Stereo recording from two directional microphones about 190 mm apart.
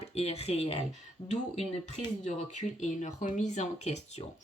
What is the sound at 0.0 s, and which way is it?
Speech, 35° left (ahead or behind).